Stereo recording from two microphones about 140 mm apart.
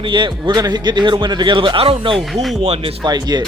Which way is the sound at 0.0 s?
35° right (ahead or behind).